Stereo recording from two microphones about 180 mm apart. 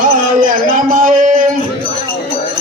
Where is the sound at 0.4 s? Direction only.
45° right (ahead or behind).